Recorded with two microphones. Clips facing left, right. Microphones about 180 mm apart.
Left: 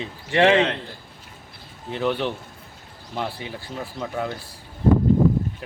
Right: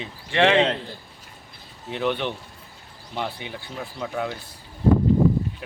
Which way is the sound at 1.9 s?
Centre (ahead or behind).